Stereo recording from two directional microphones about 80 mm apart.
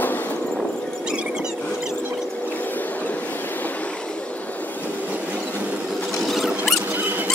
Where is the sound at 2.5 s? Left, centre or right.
Left.